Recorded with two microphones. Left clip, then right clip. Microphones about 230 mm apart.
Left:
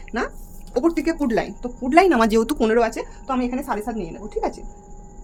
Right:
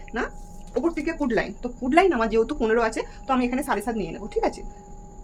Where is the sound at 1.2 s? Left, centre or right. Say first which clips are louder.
Right 1 dB; left.